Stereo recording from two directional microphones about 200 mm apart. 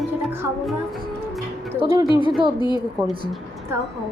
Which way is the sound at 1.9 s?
20° right (ahead or behind).